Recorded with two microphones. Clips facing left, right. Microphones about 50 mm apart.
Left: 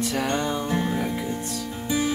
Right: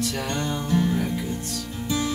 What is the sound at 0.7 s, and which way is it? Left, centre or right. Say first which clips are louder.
Music: right 2 dB; left.